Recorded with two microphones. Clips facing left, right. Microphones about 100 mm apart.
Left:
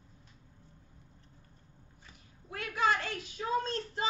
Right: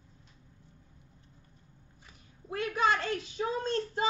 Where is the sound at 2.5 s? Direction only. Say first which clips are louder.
Right 2 dB; 30° right (ahead or behind).